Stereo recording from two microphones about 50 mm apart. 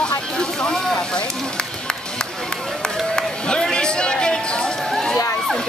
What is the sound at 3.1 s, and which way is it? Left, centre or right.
Run, centre.